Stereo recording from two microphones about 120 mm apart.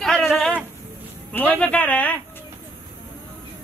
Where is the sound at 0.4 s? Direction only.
5° left (ahead or behind).